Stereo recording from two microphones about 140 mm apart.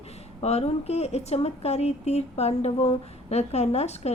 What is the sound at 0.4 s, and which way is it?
Speech, 50° left (ahead or behind).